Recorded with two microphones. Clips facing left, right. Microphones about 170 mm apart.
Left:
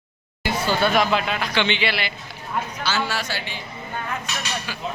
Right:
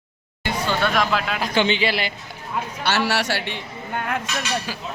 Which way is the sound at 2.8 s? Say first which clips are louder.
Right 6 dB; 65° right (ahead or behind).